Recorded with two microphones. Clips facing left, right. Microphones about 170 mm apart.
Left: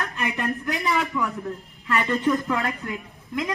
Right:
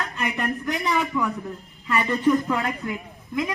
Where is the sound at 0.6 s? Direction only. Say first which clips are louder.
Right 1 dB; 20° right (ahead or behind).